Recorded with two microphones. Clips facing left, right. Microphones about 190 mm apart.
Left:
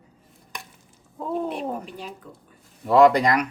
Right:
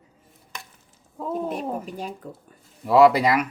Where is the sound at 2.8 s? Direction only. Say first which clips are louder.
Even; 5° right (ahead or behind).